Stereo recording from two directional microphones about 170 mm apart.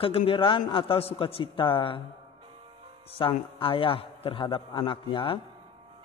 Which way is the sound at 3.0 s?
30° left (ahead or behind).